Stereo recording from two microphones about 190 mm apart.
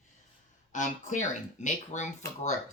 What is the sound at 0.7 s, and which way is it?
Speech, 40° left (ahead or behind).